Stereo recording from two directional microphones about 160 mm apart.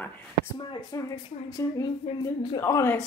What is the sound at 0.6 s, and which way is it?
Speech, 30° left (ahead or behind).